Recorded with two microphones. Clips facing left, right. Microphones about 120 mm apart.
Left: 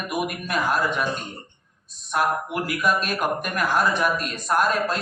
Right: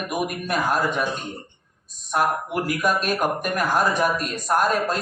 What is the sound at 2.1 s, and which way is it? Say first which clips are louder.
Speech: right 1 dB; 45° right (ahead or behind).